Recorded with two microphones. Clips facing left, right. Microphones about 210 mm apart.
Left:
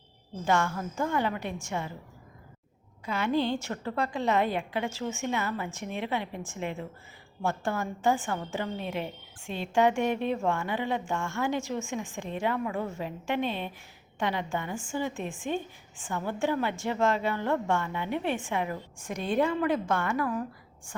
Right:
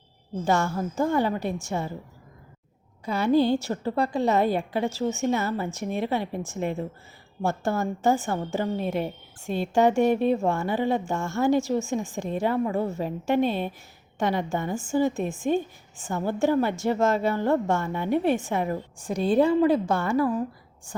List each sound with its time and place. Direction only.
0.4 s a woman's voice: 35° right (ahead or behind)
3.1 s a woman's voice: 35° right (ahead or behind)